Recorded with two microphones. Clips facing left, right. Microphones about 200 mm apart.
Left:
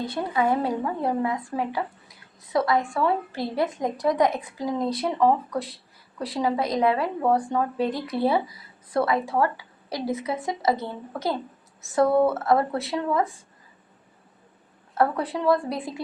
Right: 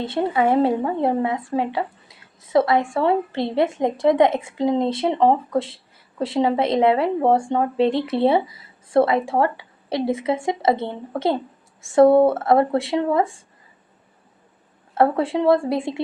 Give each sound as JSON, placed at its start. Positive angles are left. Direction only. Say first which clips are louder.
{"t": 0.0, "sound": "speech", "louder": "right 5 dB", "side_deg": -25}
{"t": 11.9, "sound": "speech", "louder": "right 7 dB", "side_deg": -25}
{"t": 14.9, "sound": "speech", "louder": "right 5 dB", "side_deg": -25}